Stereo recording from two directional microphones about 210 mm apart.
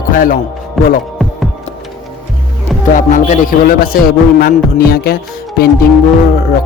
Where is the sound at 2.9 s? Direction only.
40° left (ahead or behind).